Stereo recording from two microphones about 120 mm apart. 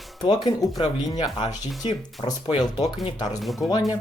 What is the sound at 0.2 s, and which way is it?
Speech, 35° left (ahead or behind).